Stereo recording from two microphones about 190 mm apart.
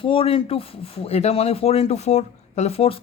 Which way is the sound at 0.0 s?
30° left (ahead or behind).